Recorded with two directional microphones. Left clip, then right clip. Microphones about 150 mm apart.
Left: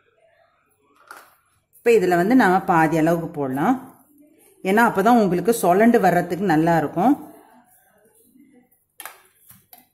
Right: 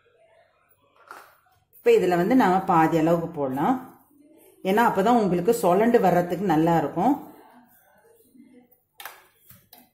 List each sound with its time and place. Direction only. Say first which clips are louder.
1.8 s speech: left 3 dB; 35° left (ahead or behind)